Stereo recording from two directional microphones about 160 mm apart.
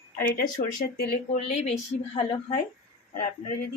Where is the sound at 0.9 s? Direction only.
75° left (ahead or behind).